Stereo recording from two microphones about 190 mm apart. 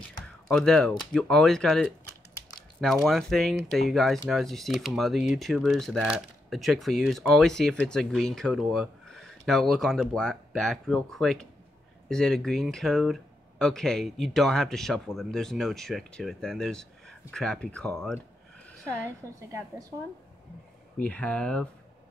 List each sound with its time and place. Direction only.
0.5 s speech: 5° left (ahead or behind)
19.0 s a woman's voice: 15° right (ahead or behind)
21.0 s speech: 5° left (ahead or behind)